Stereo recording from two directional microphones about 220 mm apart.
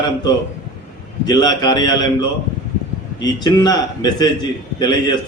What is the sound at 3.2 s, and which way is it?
A man's voice, 20° left (ahead or behind).